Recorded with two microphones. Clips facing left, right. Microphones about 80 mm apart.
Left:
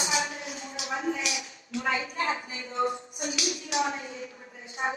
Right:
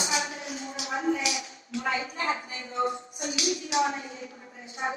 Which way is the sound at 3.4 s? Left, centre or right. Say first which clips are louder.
Right 3 dB; right.